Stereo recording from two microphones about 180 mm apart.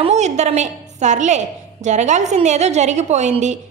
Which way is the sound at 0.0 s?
40° right (ahead or behind).